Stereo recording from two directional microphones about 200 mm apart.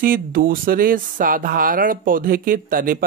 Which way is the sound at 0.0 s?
45° right (ahead or behind).